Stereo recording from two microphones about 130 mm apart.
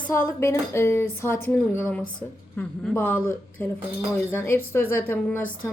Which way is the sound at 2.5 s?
10° left (ahead or behind).